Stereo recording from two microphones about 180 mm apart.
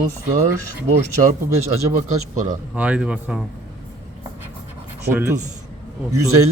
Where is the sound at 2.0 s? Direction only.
45° right (ahead or behind).